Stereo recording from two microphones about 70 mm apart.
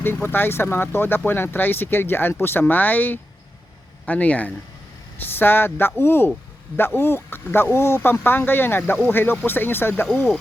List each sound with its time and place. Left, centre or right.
0.0 s speech: left
10.1 s speech: centre